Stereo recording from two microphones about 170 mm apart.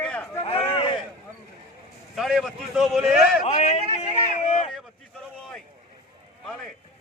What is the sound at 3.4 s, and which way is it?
Speech, 40° left (ahead or behind).